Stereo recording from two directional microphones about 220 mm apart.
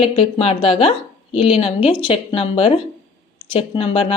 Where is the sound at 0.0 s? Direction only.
25° left (ahead or behind).